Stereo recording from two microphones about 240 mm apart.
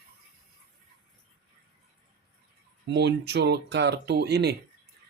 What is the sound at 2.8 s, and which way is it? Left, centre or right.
Speech, right.